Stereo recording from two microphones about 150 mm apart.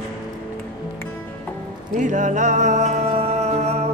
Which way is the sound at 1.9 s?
55° right (ahead or behind).